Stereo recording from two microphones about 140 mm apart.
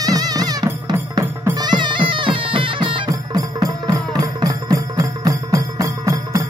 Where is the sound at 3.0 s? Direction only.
25° right (ahead or behind).